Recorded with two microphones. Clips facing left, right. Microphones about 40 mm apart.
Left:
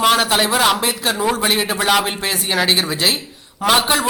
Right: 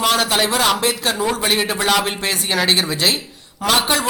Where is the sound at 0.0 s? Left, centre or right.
Centre.